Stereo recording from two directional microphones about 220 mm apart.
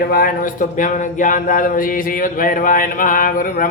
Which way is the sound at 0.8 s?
35° left (ahead or behind).